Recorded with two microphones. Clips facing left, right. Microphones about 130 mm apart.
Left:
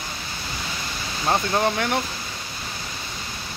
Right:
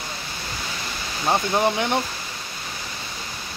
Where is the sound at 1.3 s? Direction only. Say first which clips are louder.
Right 1 dB; 10° right (ahead or behind).